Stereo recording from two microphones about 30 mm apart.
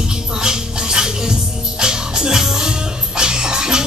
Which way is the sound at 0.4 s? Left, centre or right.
Right.